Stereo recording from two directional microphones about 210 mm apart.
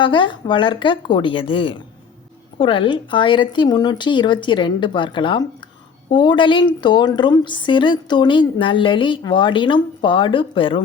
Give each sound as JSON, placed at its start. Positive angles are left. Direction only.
{"t": 0.0, "sound": "a woman's voice", "side_deg": 25}